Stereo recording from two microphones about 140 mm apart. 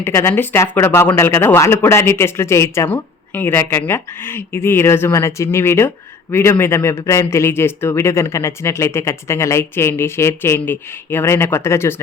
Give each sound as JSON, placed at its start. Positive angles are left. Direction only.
{"t": 0.0, "sound": "speech", "side_deg": 20}